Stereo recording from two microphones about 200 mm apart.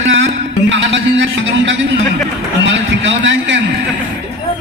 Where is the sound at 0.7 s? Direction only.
65° right (ahead or behind).